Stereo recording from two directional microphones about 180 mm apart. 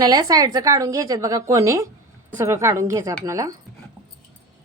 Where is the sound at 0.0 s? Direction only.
20° right (ahead or behind).